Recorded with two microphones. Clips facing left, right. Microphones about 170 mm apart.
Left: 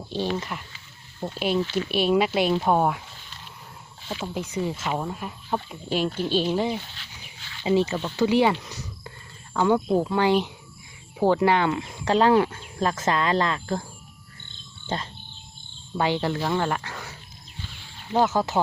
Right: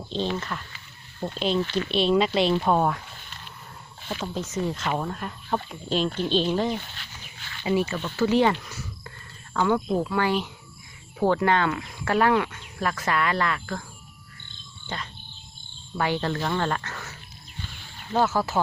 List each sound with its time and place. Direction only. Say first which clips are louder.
0.0 s speech: left 1 dB; 10° left (ahead or behind)
4.2 s speech: even; 10° left (ahead or behind)
6.7 s pig: even; 55° right (ahead or behind)
7.6 s speech: left 3 dB; 20° left (ahead or behind)
14.8 s speech: left 5 dB; 25° left (ahead or behind)
16.0 s speech: left 2 dB; 15° left (ahead or behind)
17.6 s a sound: right 1 dB; 50° right (ahead or behind)
18.1 s speech: left 1 dB; 20° left (ahead or behind)